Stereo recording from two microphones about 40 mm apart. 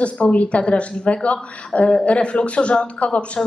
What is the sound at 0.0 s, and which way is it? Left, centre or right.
A woman's voice, left.